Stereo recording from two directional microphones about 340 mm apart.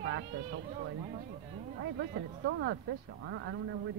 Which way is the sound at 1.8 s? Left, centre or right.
Right.